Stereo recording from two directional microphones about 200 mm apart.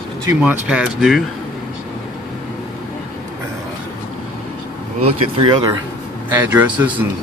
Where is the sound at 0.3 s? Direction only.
5° right (ahead or behind).